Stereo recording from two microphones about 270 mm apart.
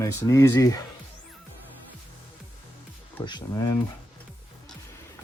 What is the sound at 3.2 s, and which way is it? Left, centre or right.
Speech, centre.